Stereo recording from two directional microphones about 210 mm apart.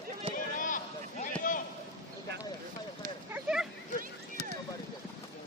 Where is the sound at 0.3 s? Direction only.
40° left (ahead or behind).